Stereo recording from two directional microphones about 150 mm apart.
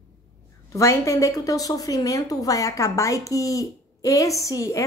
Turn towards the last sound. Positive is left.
turn(degrees=20)  # may be behind; listen again after turning